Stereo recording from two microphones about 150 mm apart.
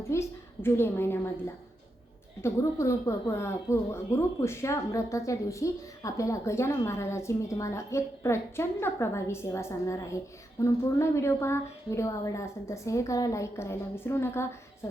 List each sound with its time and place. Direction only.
0.1 s a woman's voice: 15° left (ahead or behind)
2.4 s speech: 20° left (ahead or behind)